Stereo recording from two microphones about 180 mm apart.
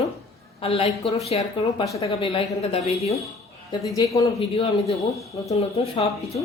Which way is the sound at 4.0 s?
15° left (ahead or behind).